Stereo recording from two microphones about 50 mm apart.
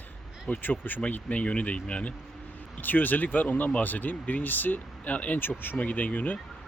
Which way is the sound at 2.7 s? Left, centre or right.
Left.